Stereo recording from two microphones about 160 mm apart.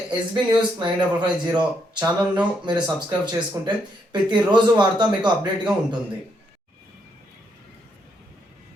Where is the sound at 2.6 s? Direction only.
30° right (ahead or behind).